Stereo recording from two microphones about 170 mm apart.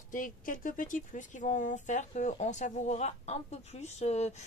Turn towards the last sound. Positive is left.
turn(degrees=40)  # may be behind; listen again after turning